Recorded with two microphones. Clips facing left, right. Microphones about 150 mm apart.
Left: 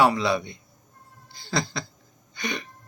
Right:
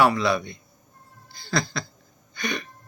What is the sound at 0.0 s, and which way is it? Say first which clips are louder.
Speech: right 1 dB; 25° left (ahead or behind).